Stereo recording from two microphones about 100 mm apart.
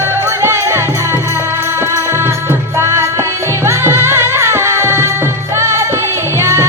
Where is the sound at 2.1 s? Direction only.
25° right (ahead or behind).